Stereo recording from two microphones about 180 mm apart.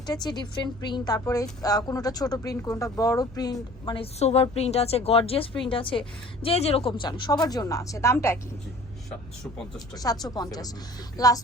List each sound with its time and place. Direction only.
0.1 s a woman's voice: 25° left (ahead or behind)
7.0 s a woman's voice: 25° left (ahead or behind)
9.0 s speech: 5° left (ahead or behind)
9.7 s a woman's voice: 20° left (ahead or behind)